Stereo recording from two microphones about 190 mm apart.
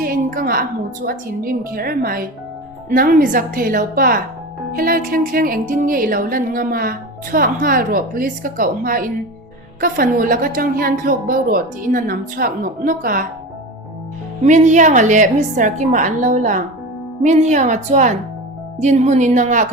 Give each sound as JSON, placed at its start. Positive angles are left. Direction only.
{"t": 0.0, "sound": "a sound", "side_deg": -50}
{"t": 1.0, "sound": "speech", "side_deg": -50}
{"t": 14.4, "sound": "a woman's voice", "side_deg": -40}